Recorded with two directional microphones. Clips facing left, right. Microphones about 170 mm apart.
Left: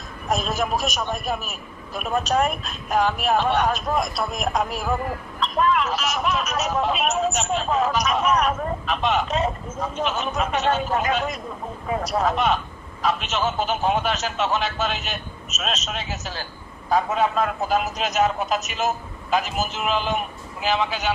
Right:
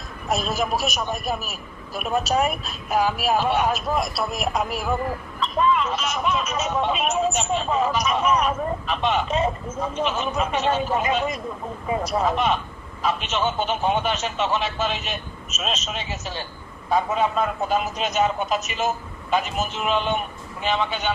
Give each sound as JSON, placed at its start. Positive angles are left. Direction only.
{"t": 0.4, "sound": "speech", "side_deg": 0}